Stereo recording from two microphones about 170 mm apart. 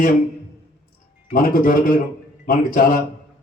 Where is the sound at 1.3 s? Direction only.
55° left (ahead or behind).